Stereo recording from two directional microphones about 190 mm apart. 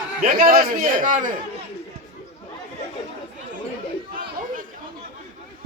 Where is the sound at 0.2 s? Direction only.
45° right (ahead or behind).